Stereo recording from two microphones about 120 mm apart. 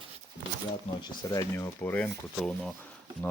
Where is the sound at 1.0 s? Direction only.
30° left (ahead or behind).